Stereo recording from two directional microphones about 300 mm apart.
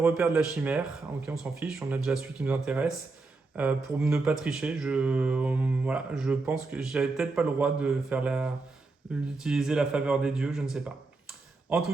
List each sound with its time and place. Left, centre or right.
0.0 s speech: centre